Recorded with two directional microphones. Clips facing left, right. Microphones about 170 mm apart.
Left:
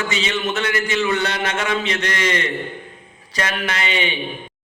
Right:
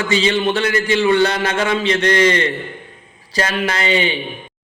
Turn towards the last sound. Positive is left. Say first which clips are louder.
# right 5 dB
turn(degrees=-35)  # may be behind; listen again after turning